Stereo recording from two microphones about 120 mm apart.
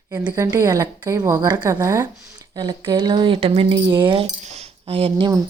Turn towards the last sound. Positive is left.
turn(degrees=-50)  # may be behind; listen again after turning